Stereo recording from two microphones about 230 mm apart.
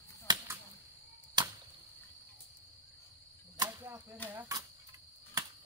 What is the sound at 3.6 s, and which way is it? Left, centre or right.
Arrow, centre.